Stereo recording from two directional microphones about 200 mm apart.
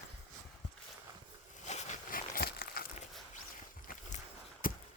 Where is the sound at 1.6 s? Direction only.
35° left (ahead or behind).